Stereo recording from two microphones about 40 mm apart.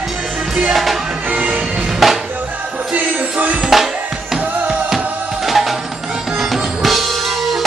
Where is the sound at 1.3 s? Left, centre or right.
Right.